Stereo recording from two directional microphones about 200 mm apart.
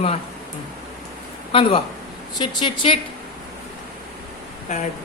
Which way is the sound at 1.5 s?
25° left (ahead or behind).